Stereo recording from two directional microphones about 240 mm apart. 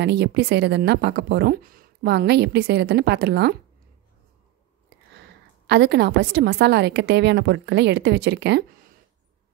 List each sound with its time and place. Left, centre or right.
0.0 s speech: right
5.7 s speech: right